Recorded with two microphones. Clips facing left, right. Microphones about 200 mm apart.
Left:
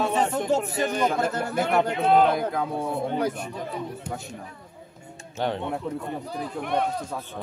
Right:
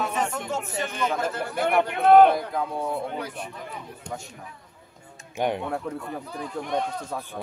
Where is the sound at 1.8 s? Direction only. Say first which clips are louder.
Right 5 dB; 60° right (ahead or behind).